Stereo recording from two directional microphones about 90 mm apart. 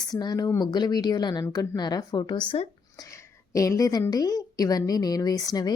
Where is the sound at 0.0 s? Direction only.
50° left (ahead or behind).